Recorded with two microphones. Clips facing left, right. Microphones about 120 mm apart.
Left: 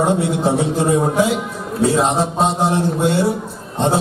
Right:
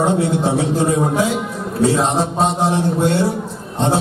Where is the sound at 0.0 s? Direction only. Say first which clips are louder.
Even; centre (ahead or behind).